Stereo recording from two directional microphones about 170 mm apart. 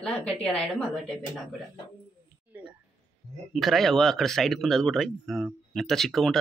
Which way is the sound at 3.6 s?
Centre (ahead or behind).